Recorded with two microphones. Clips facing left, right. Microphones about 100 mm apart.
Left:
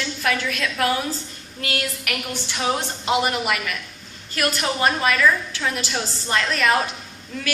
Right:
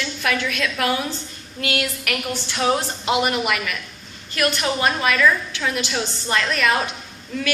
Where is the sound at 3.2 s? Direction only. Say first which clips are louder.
Right 1 dB; 30° left (ahead or behind).